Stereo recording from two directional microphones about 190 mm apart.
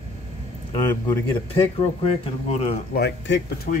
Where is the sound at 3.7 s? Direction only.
55° left (ahead or behind).